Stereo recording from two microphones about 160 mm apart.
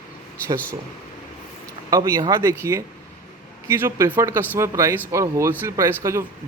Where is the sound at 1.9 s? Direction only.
20° right (ahead or behind).